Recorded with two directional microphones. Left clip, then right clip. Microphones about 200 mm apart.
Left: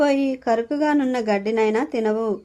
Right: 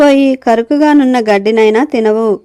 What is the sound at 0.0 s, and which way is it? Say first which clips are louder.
Speech: right 12 dB; 40° right (ahead or behind).